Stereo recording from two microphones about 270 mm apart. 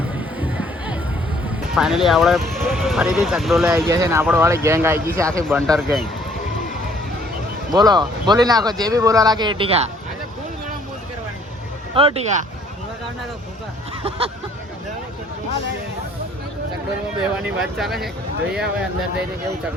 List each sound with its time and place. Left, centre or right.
0.3 s music: centre
1.7 s speech: centre
5.6 s speech: centre
7.7 s speech: centre
11.9 s speech: right
17.2 s speech: centre